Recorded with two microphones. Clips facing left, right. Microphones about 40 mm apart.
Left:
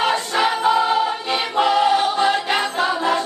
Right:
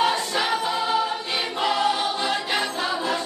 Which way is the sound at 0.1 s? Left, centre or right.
Left.